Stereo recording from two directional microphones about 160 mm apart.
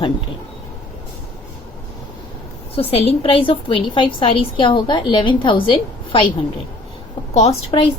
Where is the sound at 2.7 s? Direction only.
40° left (ahead or behind).